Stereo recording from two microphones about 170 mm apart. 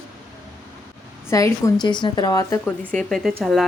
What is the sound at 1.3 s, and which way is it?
A woman's voice, 20° left (ahead or behind).